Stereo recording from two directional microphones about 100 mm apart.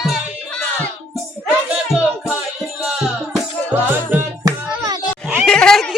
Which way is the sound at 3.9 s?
20° right (ahead or behind).